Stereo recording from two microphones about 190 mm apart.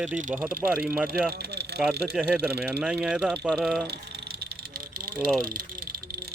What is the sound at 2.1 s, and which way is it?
Speech, 5° right (ahead or behind).